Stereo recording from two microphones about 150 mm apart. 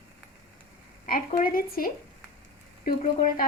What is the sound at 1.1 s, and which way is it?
Speech, 75° left (ahead or behind).